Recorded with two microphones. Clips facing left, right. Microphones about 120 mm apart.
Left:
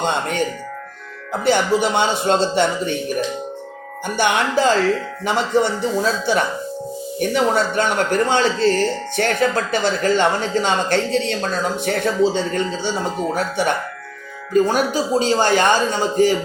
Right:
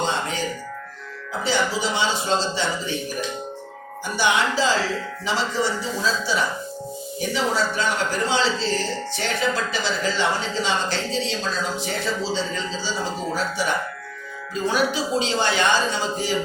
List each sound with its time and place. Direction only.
0.0 s music: 60° left (ahead or behind)
1.5 s speech: 60° left (ahead or behind)
4.0 s speech: 55° left (ahead or behind)
14.5 s speech: 45° left (ahead or behind)